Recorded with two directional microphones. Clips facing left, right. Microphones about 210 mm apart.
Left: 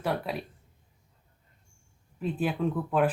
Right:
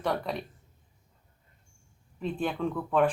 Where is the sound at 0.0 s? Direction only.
5° left (ahead or behind).